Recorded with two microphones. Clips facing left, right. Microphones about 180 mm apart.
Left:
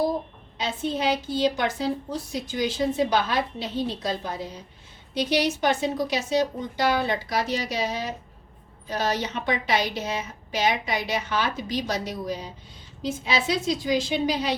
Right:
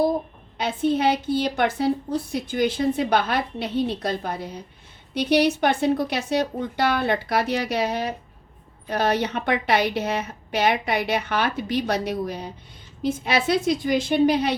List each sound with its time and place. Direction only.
0.5 s a woman's voice: 55° right (ahead or behind)